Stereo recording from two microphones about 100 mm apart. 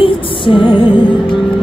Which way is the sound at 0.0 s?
60° left (ahead or behind).